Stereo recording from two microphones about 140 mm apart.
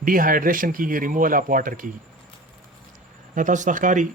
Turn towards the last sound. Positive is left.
turn(degrees=-70)  # may be behind; listen again after turning